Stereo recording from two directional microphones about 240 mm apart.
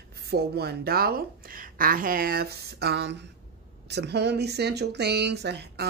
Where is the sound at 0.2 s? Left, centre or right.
Right.